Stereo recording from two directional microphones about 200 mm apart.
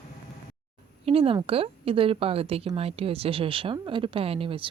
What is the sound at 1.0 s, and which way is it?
Speech, 30° right (ahead or behind).